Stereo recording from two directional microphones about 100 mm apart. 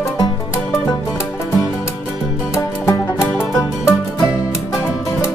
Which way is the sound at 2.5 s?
25° left (ahead or behind).